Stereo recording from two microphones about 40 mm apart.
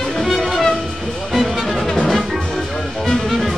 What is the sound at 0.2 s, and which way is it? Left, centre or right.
Music, centre.